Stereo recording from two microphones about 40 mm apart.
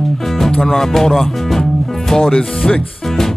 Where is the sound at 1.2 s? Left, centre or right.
Centre.